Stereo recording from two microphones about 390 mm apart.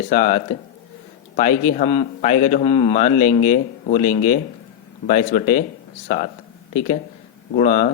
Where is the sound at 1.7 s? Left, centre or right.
Centre.